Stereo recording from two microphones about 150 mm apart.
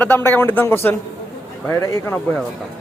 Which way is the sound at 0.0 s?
15° left (ahead or behind).